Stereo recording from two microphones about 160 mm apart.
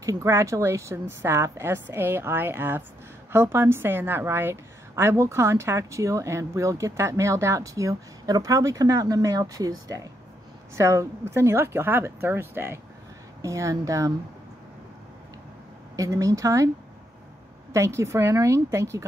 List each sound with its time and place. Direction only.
0.0 s a woman's voice: 20° right (ahead or behind)
16.0 s a woman's voice: 20° right (ahead or behind)
17.7 s a woman's voice: 20° right (ahead or behind)